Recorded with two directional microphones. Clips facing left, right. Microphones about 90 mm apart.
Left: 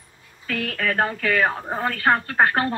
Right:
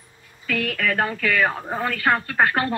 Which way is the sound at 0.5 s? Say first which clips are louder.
Right 1 dB; 35° left (ahead or behind).